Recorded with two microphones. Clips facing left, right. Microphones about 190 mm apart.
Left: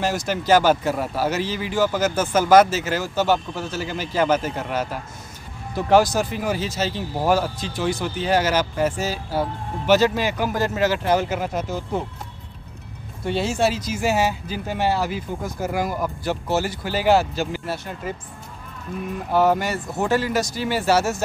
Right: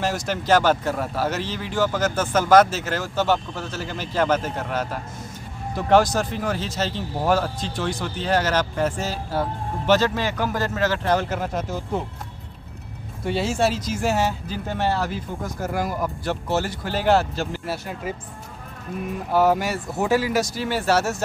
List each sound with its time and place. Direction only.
0.0 s speech: centre (ahead or behind)
13.2 s speech: centre (ahead or behind)
19.3 s speech: 5° right (ahead or behind)